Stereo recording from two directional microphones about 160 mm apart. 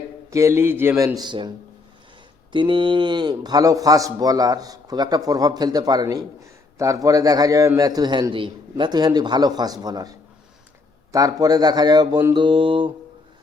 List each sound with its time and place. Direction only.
0.3 s a man's voice: 20° right (ahead or behind)
12.3 s mantra: 30° right (ahead or behind)